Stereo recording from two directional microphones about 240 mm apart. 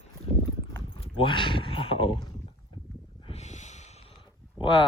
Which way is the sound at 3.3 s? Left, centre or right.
Left.